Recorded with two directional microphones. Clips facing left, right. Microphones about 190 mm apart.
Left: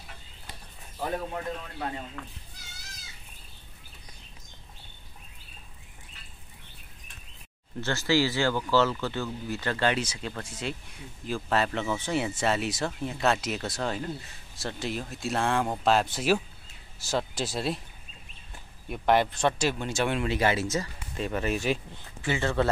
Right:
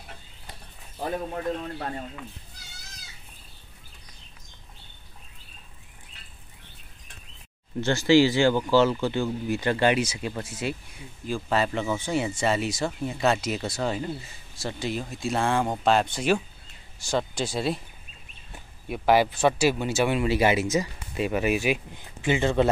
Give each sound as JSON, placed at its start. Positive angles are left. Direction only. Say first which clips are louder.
{"t": 7.8, "sound": "speech", "louder": "right 7 dB", "side_deg": -15}
{"t": 18.9, "sound": "speech", "louder": "right 3 dB", "side_deg": -5}